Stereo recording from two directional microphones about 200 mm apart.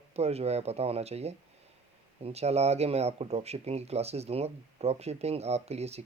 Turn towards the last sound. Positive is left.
turn(degrees=-30)  # may be behind; listen again after turning